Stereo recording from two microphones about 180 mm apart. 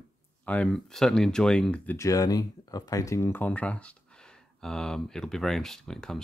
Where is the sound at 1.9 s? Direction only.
20° left (ahead or behind).